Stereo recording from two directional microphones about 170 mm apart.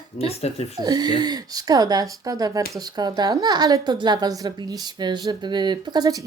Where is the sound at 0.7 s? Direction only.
25° right (ahead or behind).